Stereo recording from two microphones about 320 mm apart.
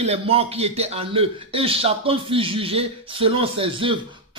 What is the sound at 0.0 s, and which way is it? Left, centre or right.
A man's voice, centre.